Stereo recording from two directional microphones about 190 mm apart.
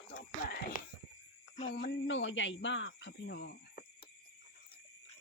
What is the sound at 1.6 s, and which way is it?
Speech, 45° left (ahead or behind).